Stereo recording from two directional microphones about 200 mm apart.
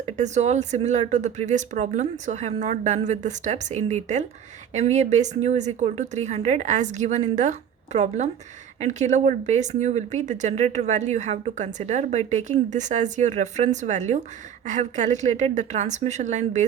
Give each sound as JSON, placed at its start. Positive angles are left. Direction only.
{"t": 0.2, "sound": "speech", "side_deg": -35}